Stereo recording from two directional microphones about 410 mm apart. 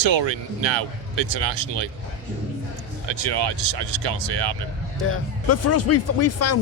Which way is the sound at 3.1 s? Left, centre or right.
Right.